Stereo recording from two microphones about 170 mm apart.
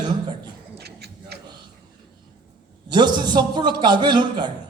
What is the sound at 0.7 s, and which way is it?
Music, 70° right (ahead or behind).